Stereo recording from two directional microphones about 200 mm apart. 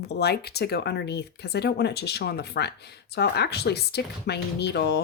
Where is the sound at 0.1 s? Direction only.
55° left (ahead or behind).